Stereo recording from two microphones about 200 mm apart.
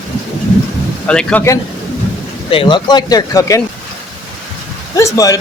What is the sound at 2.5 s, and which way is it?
Speech, 25° left (ahead or behind).